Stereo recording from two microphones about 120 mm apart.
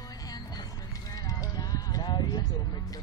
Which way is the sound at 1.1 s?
30° left (ahead or behind).